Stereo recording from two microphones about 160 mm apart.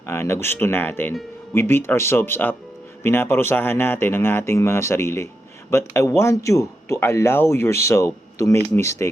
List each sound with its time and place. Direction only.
0.0 s speech: 15° left (ahead or behind)